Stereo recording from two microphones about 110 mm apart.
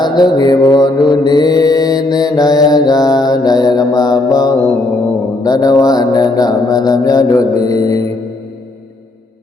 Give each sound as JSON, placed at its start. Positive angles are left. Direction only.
{"t": 0.0, "sound": "mantra", "side_deg": 40}